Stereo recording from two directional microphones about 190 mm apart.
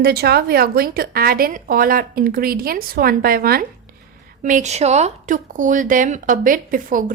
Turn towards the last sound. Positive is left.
turn(degrees=-45)  # may be behind; listen again after turning